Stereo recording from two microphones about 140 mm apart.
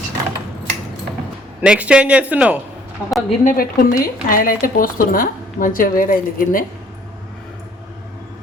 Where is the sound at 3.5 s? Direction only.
90° left.